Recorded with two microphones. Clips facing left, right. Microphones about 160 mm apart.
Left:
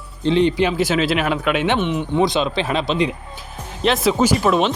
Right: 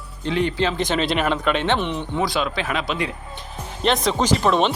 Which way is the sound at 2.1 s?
20° left (ahead or behind).